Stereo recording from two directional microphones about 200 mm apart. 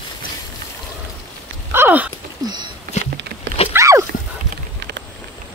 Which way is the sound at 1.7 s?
10° right (ahead or behind).